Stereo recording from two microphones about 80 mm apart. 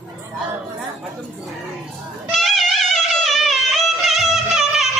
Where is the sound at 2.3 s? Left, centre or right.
Centre.